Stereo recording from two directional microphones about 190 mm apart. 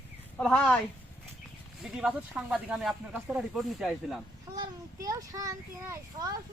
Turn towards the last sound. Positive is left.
turn(degrees=-15)  # may be behind; listen again after turning